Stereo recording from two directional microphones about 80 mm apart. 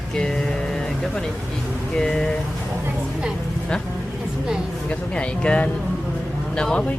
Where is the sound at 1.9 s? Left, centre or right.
Centre.